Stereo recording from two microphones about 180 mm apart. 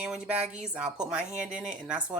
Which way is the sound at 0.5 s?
5° right (ahead or behind).